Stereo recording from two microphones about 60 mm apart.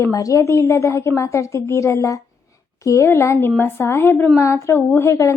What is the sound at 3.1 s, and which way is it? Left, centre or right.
A woman's voice, left.